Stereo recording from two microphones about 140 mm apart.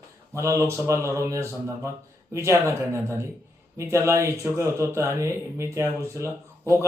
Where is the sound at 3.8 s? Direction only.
20° right (ahead or behind).